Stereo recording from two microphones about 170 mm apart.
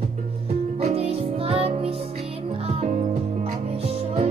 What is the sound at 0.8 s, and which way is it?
Music, 35° right (ahead or behind).